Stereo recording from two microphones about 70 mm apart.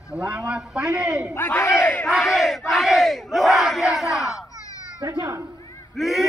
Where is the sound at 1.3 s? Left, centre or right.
Left.